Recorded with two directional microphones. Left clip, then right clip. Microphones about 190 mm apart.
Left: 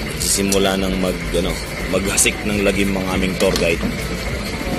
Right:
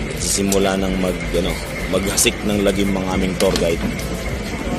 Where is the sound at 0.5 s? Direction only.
Centre (ahead or behind).